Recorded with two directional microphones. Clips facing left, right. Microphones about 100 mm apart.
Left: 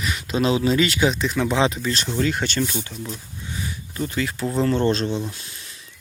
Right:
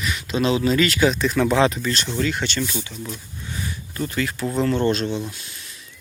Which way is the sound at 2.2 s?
30° left (ahead or behind).